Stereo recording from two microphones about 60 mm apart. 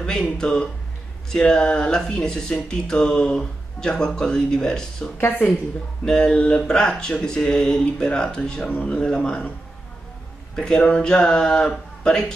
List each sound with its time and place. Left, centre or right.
0.0 s speech: centre
5.1 s speech: left
6.0 s a man's voice: centre
10.5 s speech: centre